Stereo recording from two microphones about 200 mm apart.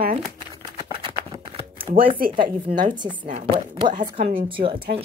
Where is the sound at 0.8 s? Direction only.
20° right (ahead or behind).